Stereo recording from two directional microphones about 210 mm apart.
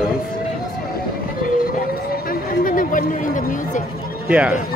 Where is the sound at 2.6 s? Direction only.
40° left (ahead or behind).